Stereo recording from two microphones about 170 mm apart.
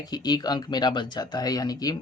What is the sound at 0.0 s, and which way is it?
Speech, 25° left (ahead or behind).